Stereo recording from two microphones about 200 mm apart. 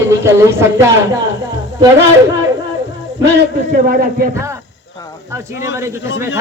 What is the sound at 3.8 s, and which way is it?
Speech, 45° right (ahead or behind).